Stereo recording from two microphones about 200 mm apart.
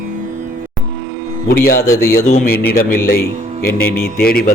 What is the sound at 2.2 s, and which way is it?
Speech, 40° left (ahead or behind).